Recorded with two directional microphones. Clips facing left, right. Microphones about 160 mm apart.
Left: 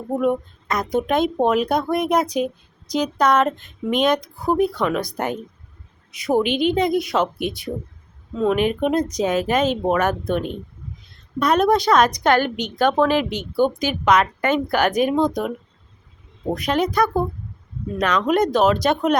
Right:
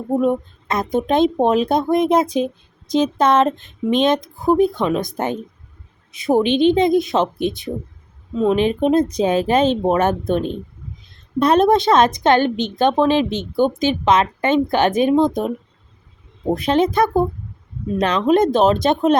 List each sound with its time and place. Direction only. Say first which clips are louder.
0.2 s speech: right 2 dB; 25° right (ahead or behind)